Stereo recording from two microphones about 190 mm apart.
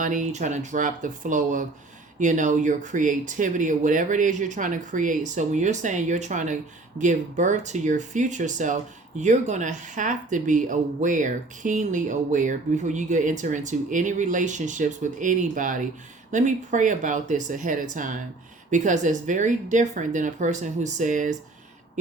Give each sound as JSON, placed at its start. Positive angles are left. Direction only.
{"t": 0.0, "sound": "speech", "side_deg": -40}